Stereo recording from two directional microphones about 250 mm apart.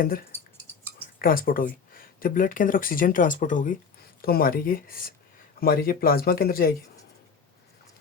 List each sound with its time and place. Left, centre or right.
0.0 s speech: left